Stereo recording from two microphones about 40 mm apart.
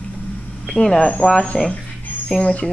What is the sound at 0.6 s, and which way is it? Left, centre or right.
Speech, centre.